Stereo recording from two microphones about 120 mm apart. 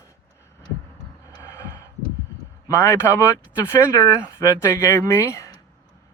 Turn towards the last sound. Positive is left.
turn(degrees=25)  # may be behind; listen again after turning